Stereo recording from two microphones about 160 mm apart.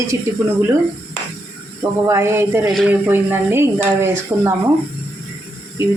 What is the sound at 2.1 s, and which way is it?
A woman's voice, 15° right (ahead or behind).